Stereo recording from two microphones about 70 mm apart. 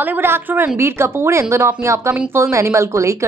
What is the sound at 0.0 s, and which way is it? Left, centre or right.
A woman's voice, right.